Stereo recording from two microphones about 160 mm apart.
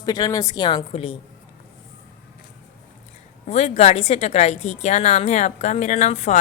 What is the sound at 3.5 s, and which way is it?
Speech, 40° left (ahead or behind).